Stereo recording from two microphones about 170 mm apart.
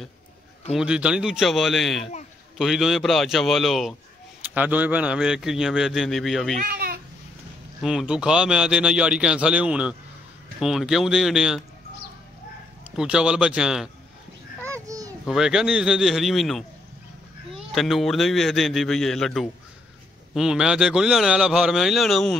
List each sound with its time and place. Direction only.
0.7 s a man's voice: 5° right (ahead or behind)
6.6 s a sound: 60° right (ahead or behind)
7.8 s a man's voice: 5° right (ahead or behind)
12.9 s a man's voice: 5° right (ahead or behind)
14.7 s a sound: 20° right (ahead or behind)
15.2 s a man's voice: 5° right (ahead or behind)